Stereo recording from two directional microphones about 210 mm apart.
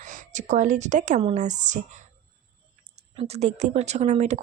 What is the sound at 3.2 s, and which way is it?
A woman's voice, 30° right (ahead or behind).